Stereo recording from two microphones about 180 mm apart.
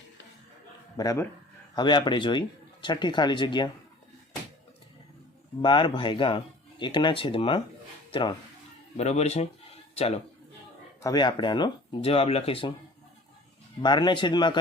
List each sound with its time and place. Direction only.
0.9 s speech: 20° left (ahead or behind)
5.6 s speech: 25° left (ahead or behind)
9.0 s speech: 40° left (ahead or behind)
11.0 s speech: 25° left (ahead or behind)
13.8 s speech: 25° left (ahead or behind)